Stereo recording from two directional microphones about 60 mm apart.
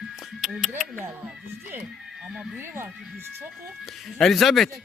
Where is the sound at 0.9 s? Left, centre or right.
Right.